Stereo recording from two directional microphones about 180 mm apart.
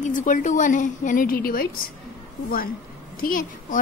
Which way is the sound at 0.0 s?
45° left (ahead or behind).